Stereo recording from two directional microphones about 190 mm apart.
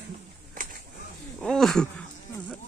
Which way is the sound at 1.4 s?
Centre (ahead or behind).